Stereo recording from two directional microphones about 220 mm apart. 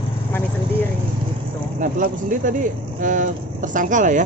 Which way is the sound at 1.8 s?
35° right (ahead or behind).